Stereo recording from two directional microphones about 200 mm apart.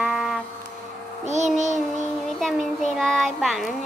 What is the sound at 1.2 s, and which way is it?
Child singing, 35° right (ahead or behind).